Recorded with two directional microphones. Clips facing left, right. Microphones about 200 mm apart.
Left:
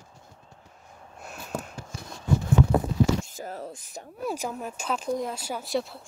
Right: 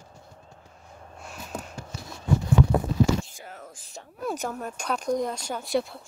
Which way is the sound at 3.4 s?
40° left (ahead or behind).